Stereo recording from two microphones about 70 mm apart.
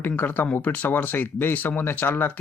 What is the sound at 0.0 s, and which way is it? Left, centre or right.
Speech, left.